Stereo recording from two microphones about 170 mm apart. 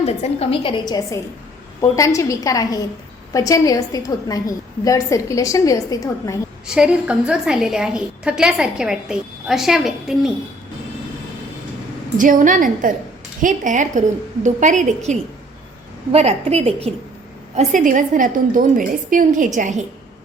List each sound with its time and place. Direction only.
0.0 s a woman's voice: 40° left (ahead or behind); by 6.4 s 20° left (ahead or behind)
6.7 s a woman's voice: 5° right (ahead or behind)
12.1 s a woman's voice: 50° right (ahead or behind)